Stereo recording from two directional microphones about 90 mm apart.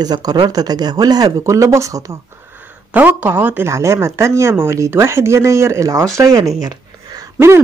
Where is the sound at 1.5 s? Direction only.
35° right (ahead or behind).